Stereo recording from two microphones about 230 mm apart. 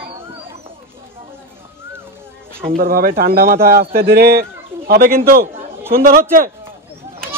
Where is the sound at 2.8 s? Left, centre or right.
Right.